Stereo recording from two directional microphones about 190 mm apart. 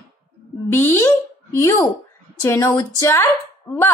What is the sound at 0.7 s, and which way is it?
Speech, 10° left (ahead or behind).